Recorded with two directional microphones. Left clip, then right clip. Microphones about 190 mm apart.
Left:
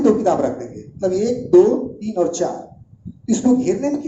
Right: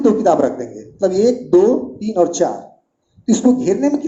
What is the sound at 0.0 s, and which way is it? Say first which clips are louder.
A woman's voice: right 3 dB; 55° right (ahead or behind).